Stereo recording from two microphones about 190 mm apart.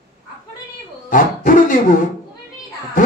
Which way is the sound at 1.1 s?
45° left (ahead or behind).